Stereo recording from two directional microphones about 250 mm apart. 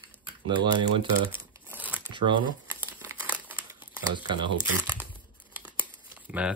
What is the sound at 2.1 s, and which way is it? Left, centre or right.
Speech, centre.